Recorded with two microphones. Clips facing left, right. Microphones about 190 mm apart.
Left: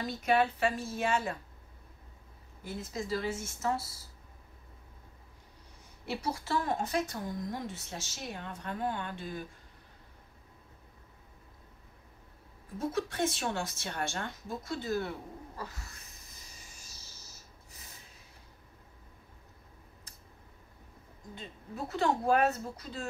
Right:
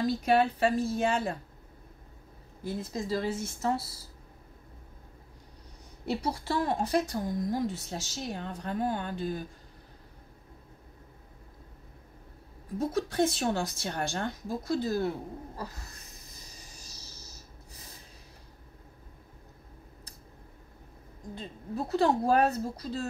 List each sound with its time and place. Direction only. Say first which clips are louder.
0.0 s speech: right 4 dB; 35° right (ahead or behind)
2.6 s speech: right 4 dB; 35° right (ahead or behind)
6.2 s speech: right 1 dB; 35° right (ahead or behind)
12.7 s speech: right 5 dB; 35° right (ahead or behind)
15.5 s cat: right 3 dB; 35° right (ahead or behind)
21.4 s speech: right 5 dB; 35° right (ahead or behind)